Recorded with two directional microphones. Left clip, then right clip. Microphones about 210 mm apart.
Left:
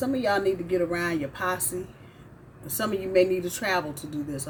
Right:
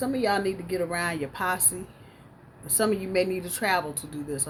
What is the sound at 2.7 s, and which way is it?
A woman's voice, 20° right (ahead or behind).